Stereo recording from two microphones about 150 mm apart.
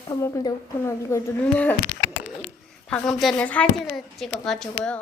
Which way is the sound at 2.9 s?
Centre (ahead or behind).